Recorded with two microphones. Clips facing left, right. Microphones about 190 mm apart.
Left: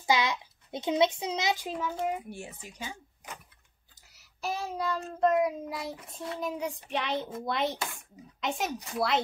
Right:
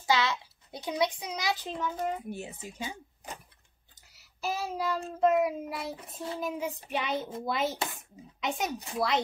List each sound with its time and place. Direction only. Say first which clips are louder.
0.0 s a child's voice: left 1 dB; 15° left (ahead or behind)
2.2 s speech: right 3 dB; 20° right (ahead or behind)
4.4 s child singing: right 1 dB; 5° right (ahead or behind)